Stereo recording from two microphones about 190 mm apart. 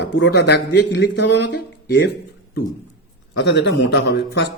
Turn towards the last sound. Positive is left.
turn(degrees=65)  # may be behind; listen again after turning